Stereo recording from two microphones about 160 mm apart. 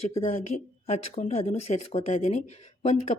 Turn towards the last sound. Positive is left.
turn(degrees=45)  # may be behind; listen again after turning